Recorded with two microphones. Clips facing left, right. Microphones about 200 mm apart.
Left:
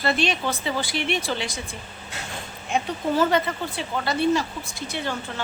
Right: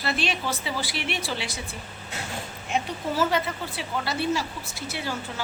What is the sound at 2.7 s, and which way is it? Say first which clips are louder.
Speech: left 4 dB; 5° right (ahead or behind).